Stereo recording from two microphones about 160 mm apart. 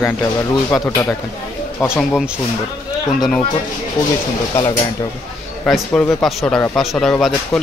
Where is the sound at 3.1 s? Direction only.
Centre (ahead or behind).